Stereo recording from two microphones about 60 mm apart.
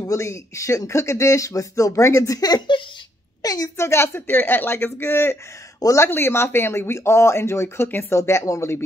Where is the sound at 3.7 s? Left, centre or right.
Left.